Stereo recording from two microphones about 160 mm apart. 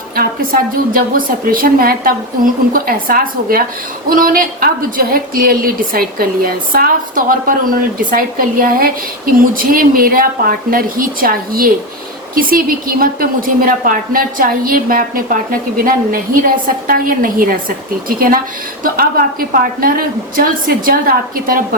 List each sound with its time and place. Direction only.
0.2 s a woman's voice: 65° right (ahead or behind)
18.8 s a woman's voice: 65° right (ahead or behind)